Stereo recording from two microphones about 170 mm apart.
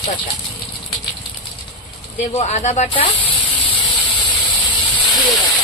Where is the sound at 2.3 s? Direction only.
40° left (ahead or behind).